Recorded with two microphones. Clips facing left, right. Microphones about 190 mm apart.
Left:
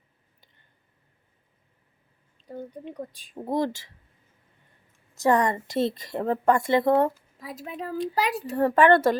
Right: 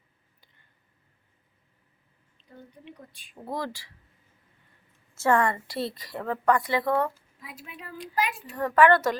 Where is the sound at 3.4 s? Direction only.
20° left (ahead or behind).